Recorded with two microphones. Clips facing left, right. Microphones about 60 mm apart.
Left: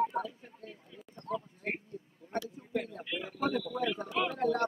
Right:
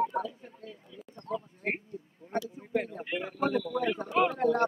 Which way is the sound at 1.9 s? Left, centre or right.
Centre.